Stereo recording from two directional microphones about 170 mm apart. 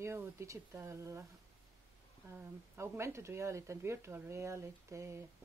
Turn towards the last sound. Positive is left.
turn(degrees=-15)  # may be behind; listen again after turning